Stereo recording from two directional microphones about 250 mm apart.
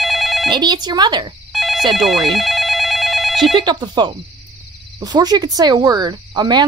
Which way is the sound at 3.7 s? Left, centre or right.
Centre.